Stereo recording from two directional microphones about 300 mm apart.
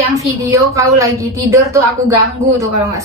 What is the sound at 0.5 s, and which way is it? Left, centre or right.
A woman's voice, centre.